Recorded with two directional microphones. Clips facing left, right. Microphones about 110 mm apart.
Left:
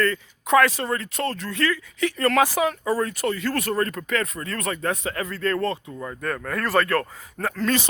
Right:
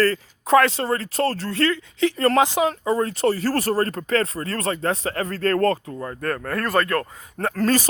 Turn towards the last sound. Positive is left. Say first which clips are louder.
# right 3 dB
turn(degrees=-40)  # may be behind; listen again after turning